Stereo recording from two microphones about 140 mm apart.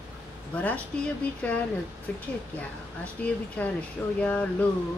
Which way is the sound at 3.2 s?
10° left (ahead or behind).